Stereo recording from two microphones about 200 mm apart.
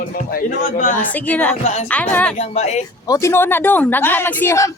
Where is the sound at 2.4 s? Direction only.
35° left (ahead or behind).